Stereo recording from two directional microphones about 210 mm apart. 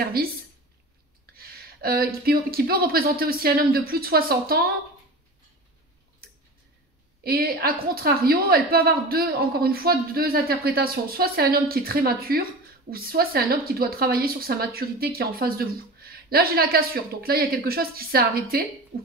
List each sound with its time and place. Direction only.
0.0 s speech: 45° right (ahead or behind)
7.2 s speech: 45° right (ahead or behind)